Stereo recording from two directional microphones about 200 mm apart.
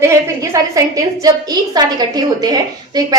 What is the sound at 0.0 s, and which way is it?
A woman's voice, 15° right (ahead or behind).